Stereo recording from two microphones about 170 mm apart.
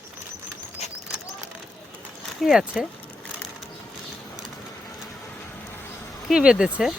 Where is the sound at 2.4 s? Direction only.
Centre (ahead or behind).